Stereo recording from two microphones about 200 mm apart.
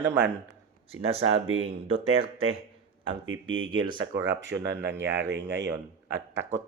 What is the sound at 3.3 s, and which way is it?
Speech, 90° right.